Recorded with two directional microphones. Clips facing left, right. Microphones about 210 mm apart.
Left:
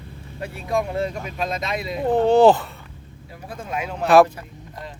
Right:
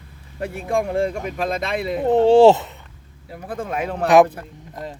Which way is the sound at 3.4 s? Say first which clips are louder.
Right 4 dB; 55° right (ahead or behind).